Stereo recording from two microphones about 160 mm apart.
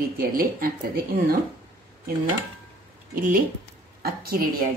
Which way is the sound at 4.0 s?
70° right (ahead or behind).